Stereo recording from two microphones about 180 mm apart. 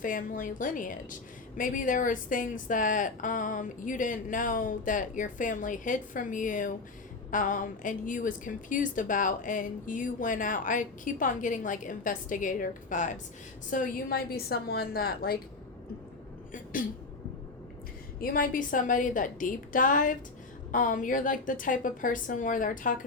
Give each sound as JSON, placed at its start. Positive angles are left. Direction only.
{"t": 0.0, "sound": "a woman's voice", "side_deg": 50}
{"t": 16.5, "sound": "speech", "side_deg": 50}
{"t": 18.2, "sound": "a woman's voice", "side_deg": 50}